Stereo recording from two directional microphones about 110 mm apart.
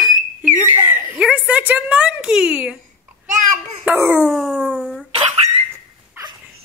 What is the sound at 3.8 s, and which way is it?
Speech, 15° right (ahead or behind).